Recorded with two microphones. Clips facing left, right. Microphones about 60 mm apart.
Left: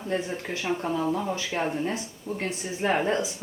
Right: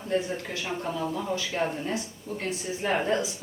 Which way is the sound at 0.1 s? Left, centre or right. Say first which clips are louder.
Right 1 dB; left.